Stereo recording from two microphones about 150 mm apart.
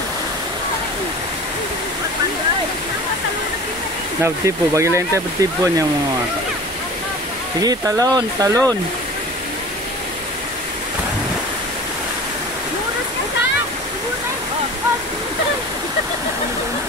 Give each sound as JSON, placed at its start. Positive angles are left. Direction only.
{"t": 4.2, "sound": "speech", "side_deg": -20}
{"t": 7.6, "sound": "speech", "side_deg": -25}